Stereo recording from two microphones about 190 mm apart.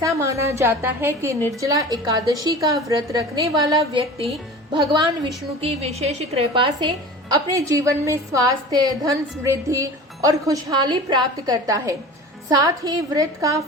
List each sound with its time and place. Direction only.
0.0 s a woman's voice: 15° right (ahead or behind)